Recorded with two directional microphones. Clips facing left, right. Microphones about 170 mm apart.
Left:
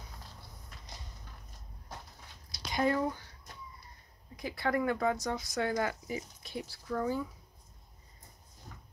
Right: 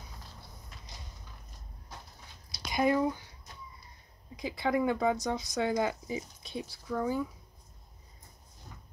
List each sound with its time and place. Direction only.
2.7 s speech: 15° right (ahead or behind)
4.4 s speech: 20° right (ahead or behind)